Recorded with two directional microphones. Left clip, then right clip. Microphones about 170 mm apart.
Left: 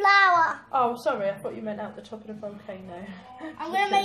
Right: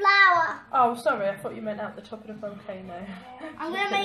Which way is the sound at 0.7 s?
5° left (ahead or behind).